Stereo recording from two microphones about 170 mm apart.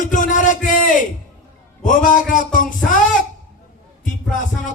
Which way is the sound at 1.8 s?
50° left (ahead or behind).